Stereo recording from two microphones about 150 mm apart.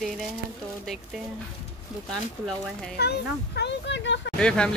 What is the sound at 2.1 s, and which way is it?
Speech, 5° left (ahead or behind).